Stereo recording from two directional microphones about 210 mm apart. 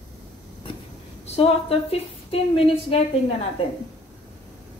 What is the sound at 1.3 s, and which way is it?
A woman's voice, 30° left (ahead or behind).